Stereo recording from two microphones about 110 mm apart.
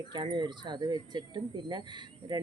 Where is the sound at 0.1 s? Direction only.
45° right (ahead or behind).